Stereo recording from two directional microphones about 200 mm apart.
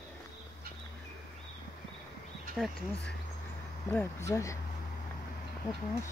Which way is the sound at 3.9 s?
15° left (ahead or behind).